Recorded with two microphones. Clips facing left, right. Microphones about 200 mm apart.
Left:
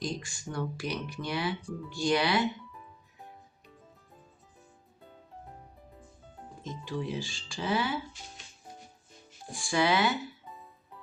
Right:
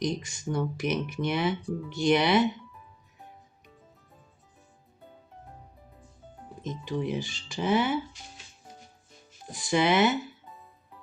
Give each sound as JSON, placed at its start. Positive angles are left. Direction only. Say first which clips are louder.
{"t": 0.0, "sound": "speech", "louder": "right 5 dB", "side_deg": -20}
{"t": 6.7, "sound": "speech", "louder": "right 4 dB", "side_deg": -20}
{"t": 9.5, "sound": "speech", "louder": "right 3 dB", "side_deg": -20}